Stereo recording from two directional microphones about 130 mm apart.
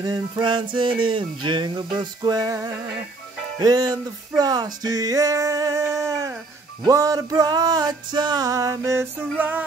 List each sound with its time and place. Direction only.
0.0 s music: 35° right (ahead or behind); by 9.7 s 15° right (ahead or behind)